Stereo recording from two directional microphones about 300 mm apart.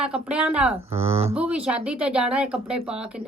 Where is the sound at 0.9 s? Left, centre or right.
Centre.